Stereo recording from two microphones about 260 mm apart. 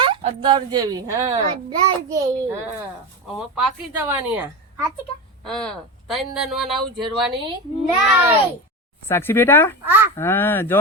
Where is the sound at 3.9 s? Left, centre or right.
Centre.